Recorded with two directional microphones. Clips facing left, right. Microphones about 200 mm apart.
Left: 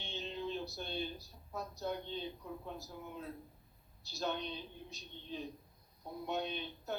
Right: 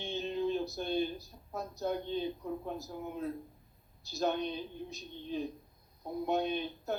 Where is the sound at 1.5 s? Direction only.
45° right (ahead or behind).